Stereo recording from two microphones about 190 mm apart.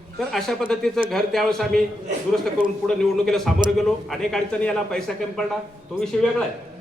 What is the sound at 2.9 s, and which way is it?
A man's voice, centre (ahead or behind).